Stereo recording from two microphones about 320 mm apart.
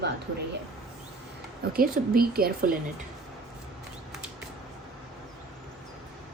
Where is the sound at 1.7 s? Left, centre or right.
Right.